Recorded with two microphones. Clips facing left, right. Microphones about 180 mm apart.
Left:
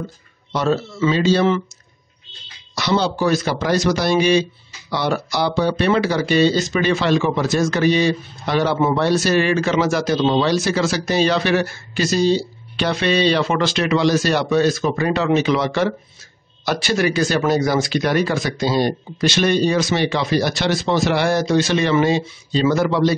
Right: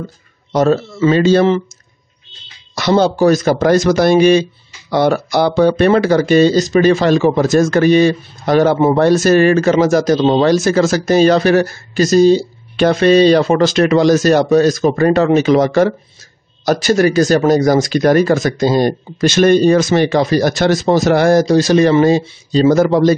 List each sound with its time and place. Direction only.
0.5 s speech: 50° right (ahead or behind)
2.7 s speech: 50° right (ahead or behind)